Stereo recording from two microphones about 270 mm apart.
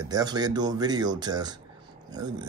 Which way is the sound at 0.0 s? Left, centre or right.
Centre.